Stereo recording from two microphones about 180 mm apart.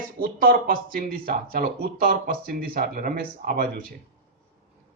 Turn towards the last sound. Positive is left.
turn(degrees=-55)  # may be behind; listen again after turning